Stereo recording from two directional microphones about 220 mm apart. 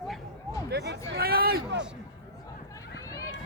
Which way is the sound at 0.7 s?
50° right (ahead or behind).